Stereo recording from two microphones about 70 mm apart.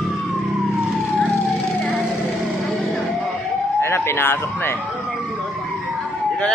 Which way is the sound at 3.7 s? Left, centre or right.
Left.